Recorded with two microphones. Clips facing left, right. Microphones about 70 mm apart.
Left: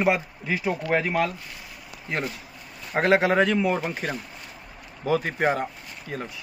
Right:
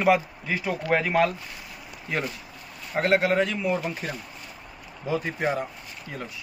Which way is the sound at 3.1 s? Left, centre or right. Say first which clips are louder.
Left 2 dB; left.